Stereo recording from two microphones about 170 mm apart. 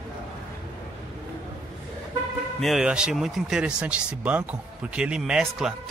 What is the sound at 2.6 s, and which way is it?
A man's voice, 5° right (ahead or behind).